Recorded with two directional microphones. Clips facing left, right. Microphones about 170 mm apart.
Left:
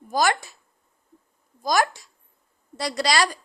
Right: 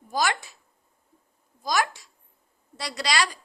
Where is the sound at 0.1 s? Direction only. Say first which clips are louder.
Left 4 dB; 45° left (ahead or behind).